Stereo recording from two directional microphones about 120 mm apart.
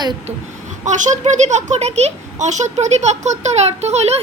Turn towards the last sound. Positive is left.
turn(degrees=-65)  # may be behind; listen again after turning